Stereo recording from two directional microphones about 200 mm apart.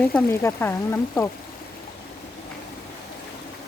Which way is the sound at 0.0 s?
10° left (ahead or behind).